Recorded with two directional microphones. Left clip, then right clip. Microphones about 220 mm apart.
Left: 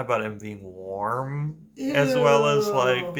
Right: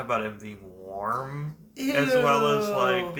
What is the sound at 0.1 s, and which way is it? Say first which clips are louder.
Speech: left 1 dB; 45° left (ahead or behind).